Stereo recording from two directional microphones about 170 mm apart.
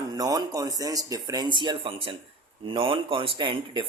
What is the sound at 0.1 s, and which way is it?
A man's voice, 20° right (ahead or behind).